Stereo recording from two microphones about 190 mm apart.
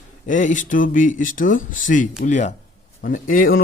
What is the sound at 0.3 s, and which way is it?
A man's voice, 40° left (ahead or behind).